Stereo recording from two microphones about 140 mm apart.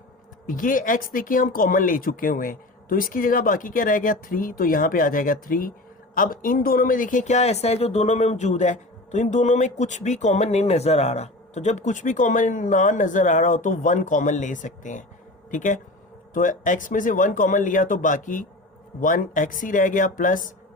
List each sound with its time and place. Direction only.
0.4 s speech: 75° left (ahead or behind)